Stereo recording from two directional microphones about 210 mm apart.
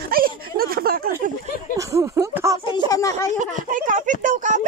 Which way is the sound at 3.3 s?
35° right (ahead or behind).